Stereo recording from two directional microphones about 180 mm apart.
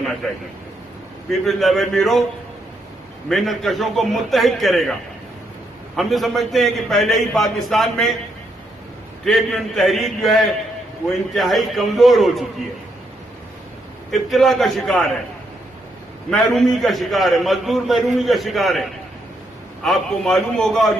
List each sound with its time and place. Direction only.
0.0 s a sound: centre (ahead or behind)
1.3 s a man's voice: centre (ahead or behind)
3.2 s a man's voice: centre (ahead or behind)
6.0 s a man's voice: centre (ahead or behind)
9.2 s a man's voice: centre (ahead or behind)
14.1 s a man's voice: centre (ahead or behind)
16.3 s a man's voice: centre (ahead or behind)